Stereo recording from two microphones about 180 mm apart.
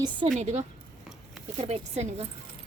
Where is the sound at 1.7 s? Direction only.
35° right (ahead or behind).